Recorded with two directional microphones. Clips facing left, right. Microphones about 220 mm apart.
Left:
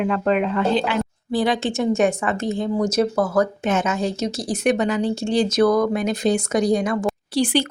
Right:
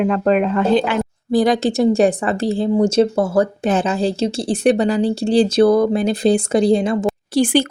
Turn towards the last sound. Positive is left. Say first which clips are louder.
# right 4 dB
turn(degrees=-50)  # may be behind; listen again after turning